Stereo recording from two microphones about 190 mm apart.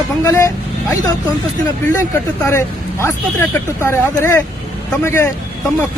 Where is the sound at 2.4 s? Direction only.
15° left (ahead or behind).